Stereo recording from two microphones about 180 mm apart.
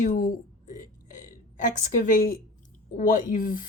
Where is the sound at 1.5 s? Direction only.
45° left (ahead or behind).